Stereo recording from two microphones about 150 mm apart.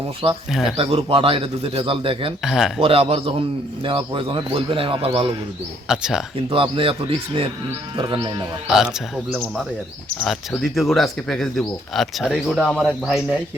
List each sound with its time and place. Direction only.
0.8 s speech: 40° right (ahead or behind)
2.4 s speech: centre (ahead or behind)
2.8 s speech: 40° right (ahead or behind)
5.9 s speech: 5° right (ahead or behind)
6.5 s speech: 35° right (ahead or behind)
7.9 s speech: 35° right (ahead or behind)
8.6 s speech: 5° right (ahead or behind)
10.2 s speech: centre (ahead or behind)